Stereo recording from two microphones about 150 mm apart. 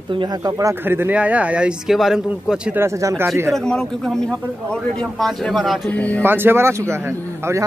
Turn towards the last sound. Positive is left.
turn(degrees=-15)  # may be behind; listen again after turning